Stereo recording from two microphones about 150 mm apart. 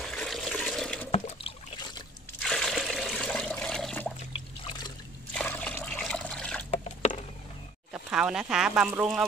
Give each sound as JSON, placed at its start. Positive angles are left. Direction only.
{"t": 0.0, "sound": "water", "side_deg": 5}
{"t": 1.1, "sound": "a sound", "side_deg": 45}
{"t": 2.4, "sound": "water", "side_deg": 5}
{"t": 5.3, "sound": "liquid", "side_deg": 10}
{"t": 7.0, "sound": "a sound", "side_deg": 45}
{"t": 7.9, "sound": "speech", "side_deg": -5}